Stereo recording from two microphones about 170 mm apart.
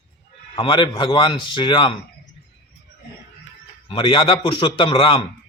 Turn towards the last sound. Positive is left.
turn(degrees=30)  # may be behind; listen again after turning